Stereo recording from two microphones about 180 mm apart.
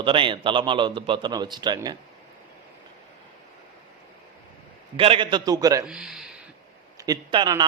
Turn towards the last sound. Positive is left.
turn(degrees=-25)  # may be behind; listen again after turning